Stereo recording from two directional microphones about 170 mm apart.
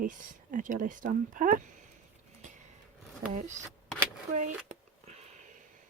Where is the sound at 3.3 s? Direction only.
50° right (ahead or behind).